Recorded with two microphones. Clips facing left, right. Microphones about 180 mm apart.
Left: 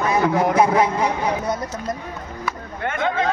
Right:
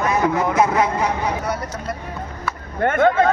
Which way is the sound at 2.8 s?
50° right (ahead or behind).